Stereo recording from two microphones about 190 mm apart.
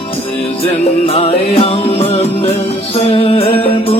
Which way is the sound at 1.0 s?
30° left (ahead or behind).